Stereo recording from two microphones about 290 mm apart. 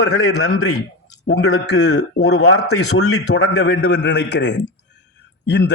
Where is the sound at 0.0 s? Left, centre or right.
Left.